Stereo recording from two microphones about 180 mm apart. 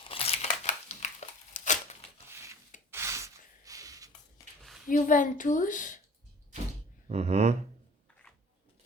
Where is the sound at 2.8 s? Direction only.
15° right (ahead or behind).